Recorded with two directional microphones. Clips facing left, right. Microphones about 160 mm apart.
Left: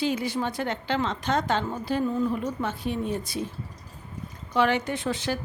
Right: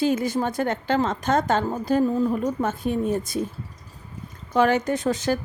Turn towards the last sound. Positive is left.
turn(degrees=-45)  # may be behind; listen again after turning